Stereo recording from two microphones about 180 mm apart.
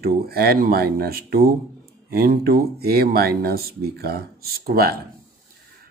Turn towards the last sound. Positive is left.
turn(degrees=-55)  # may be behind; listen again after turning